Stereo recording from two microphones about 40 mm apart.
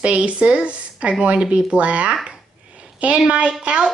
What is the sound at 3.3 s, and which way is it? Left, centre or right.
Speech, right.